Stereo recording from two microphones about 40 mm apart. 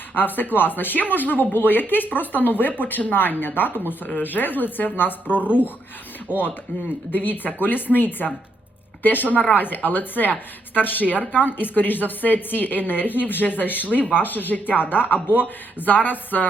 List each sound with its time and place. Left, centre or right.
0.1 s a woman's voice: left
6.3 s speech: right
7.1 s a woman's voice: left